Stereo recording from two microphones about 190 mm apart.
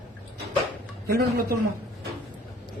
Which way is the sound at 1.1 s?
55° right (ahead or behind).